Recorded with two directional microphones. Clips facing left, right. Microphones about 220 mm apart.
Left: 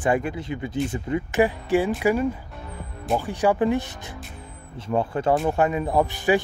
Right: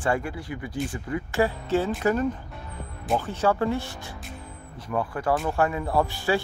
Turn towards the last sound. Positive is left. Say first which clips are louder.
# left 3 dB
turn(degrees=20)  # may be behind; listen again after turning